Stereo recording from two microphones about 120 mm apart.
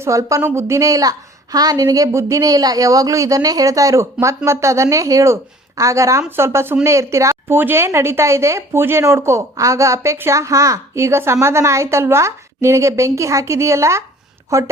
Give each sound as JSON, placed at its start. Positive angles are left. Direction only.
{"t": 0.0, "sound": "a woman's voice", "side_deg": -25}